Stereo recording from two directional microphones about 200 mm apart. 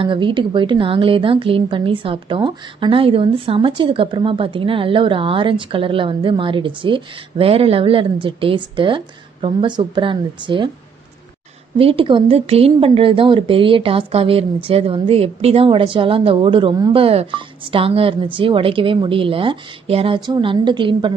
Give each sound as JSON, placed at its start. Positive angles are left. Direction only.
{"t": 0.0, "sound": "speech", "side_deg": -25}
{"t": 11.8, "sound": "speech", "side_deg": -25}